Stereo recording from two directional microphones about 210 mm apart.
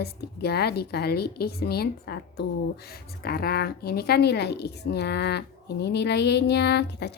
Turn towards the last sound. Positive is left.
turn(degrees=50)  # may be behind; listen again after turning